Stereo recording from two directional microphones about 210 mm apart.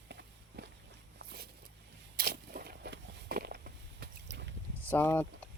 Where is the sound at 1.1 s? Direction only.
50° right (ahead or behind).